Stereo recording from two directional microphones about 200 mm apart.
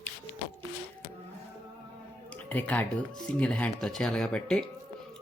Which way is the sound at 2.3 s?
5° left (ahead or behind).